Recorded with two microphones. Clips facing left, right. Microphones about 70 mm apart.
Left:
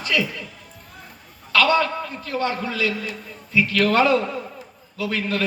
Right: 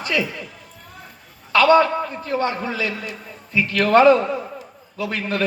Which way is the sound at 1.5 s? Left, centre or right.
Right.